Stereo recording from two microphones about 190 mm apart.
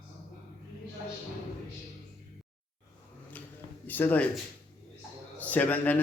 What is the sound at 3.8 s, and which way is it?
Speech, 10° left (ahead or behind).